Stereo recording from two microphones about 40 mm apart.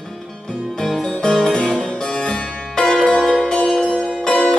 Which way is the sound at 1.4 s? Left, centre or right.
Centre.